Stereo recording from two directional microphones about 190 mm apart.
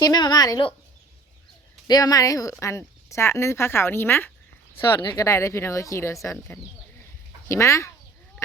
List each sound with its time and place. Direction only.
0.0 s speech: 20° left (ahead or behind)
1.9 s speech: 20° left (ahead or behind)